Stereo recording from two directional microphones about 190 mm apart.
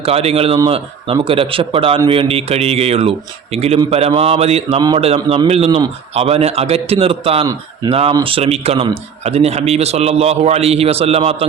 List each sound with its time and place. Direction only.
0.0 s a man's voice: 30° right (ahead or behind)